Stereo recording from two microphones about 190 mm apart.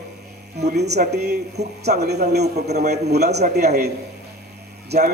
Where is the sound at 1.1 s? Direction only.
60° right (ahead or behind).